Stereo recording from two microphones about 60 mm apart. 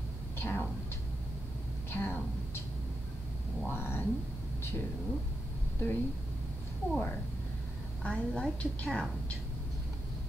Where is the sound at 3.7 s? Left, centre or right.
Left.